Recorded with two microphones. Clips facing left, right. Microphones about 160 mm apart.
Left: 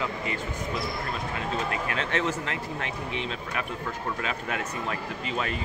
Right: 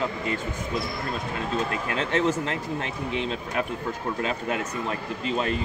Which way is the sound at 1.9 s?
35° right (ahead or behind).